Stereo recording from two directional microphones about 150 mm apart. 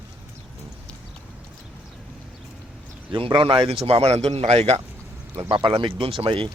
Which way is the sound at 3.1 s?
35° right (ahead or behind).